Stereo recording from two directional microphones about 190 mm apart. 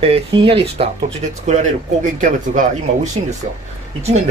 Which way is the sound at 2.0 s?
40° right (ahead or behind).